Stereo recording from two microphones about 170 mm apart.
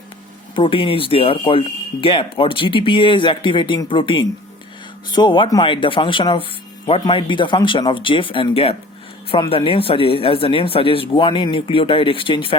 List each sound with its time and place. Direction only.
0.5 s speech: 30° left (ahead or behind)